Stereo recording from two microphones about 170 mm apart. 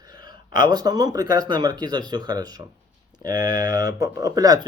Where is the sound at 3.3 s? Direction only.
60° left (ahead or behind).